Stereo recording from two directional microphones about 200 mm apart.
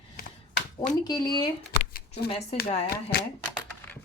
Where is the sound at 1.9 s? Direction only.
45° left (ahead or behind).